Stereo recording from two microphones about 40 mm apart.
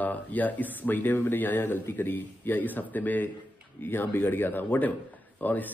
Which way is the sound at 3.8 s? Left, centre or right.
Left.